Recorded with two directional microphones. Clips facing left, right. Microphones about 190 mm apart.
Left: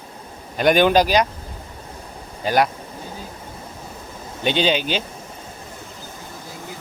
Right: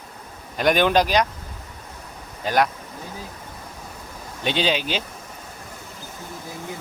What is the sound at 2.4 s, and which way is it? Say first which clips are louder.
Speech: left 2 dB; 5° left (ahead or behind).